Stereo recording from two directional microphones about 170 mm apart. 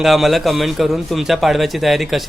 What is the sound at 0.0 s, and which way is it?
Speech, centre (ahead or behind).